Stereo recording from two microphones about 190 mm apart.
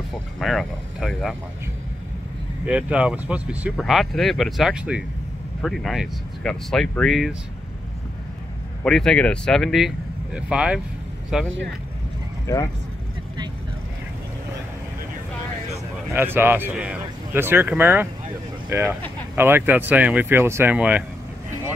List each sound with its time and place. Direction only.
0.4 s speech: centre (ahead or behind)
2.6 s speech: 5° right (ahead or behind)
8.8 s speech: 5° left (ahead or behind)
12.5 s speech: 15° left (ahead or behind)
16.1 s speech: 10° right (ahead or behind)